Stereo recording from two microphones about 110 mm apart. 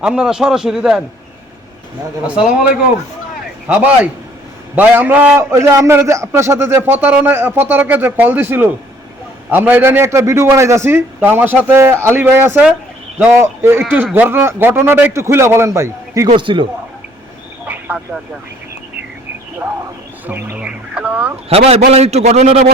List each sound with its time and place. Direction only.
0.0 s a man's voice: 10° right (ahead or behind)
2.2 s speech: 10° right (ahead or behind)
3.7 s a man's voice: 15° right (ahead or behind)
16.4 s speech: 50° right (ahead or behind)
20.2 s speech: 15° right (ahead or behind)
21.5 s a man's voice: 65° right (ahead or behind)